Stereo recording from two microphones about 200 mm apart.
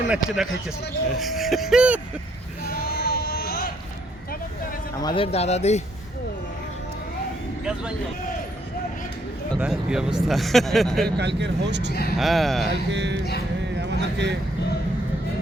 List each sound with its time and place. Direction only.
0.1 s speech: 5° right (ahead or behind)
2.7 s a sound: 50° left (ahead or behind)
4.9 s a man's voice: 25° left (ahead or behind)
7.6 s speech: 5° right (ahead or behind)
9.6 s speech: 5° right (ahead or behind)
11.2 s speech: 60° right (ahead or behind)
12.1 s speech: centre (ahead or behind)
12.9 s speech: 60° right (ahead or behind)
13.7 s a sound: 60° right (ahead or behind)